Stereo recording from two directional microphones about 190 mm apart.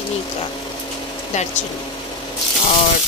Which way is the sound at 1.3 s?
35° left (ahead or behind).